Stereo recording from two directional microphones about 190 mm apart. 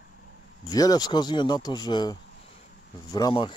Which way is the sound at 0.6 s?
20° left (ahead or behind).